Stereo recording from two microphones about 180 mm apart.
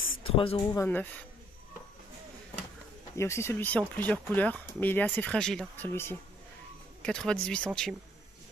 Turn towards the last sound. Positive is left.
turn(degrees=5)  # may be behind; listen again after turning